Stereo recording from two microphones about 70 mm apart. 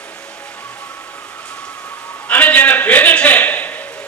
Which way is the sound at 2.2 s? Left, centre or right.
Left.